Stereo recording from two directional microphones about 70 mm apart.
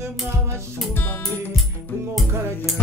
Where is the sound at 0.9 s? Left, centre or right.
Left.